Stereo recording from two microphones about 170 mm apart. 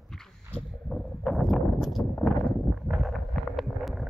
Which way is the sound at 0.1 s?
Centre (ahead or behind).